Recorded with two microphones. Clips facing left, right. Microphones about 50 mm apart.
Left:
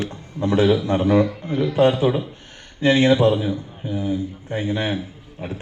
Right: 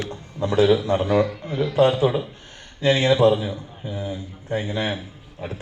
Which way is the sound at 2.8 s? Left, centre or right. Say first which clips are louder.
Left 2 dB; left.